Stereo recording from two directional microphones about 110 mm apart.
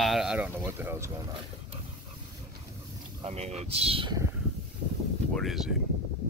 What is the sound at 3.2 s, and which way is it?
Speech, 70° right (ahead or behind).